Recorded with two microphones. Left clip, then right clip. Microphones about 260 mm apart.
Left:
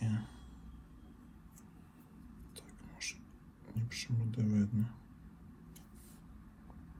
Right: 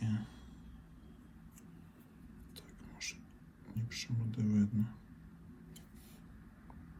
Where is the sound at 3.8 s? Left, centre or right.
Centre.